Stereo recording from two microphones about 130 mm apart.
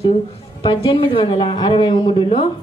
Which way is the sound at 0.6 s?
40° left (ahead or behind).